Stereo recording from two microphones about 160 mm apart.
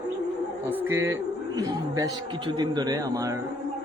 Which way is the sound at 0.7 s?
15° right (ahead or behind).